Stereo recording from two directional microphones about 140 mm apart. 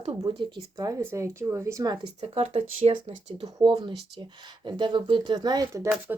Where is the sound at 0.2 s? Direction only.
35° right (ahead or behind).